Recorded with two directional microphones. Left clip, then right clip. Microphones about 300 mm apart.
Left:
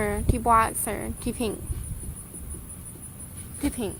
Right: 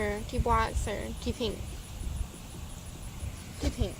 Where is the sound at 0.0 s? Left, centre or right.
Left.